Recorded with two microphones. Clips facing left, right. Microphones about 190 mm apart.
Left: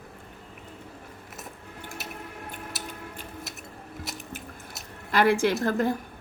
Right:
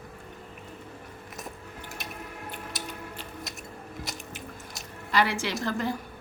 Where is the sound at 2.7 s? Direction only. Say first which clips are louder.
Right 2 dB; 5° left (ahead or behind).